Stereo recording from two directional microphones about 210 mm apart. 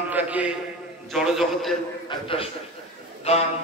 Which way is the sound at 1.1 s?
Centre (ahead or behind).